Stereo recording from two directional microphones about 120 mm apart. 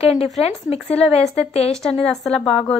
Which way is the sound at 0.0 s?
55° left (ahead or behind).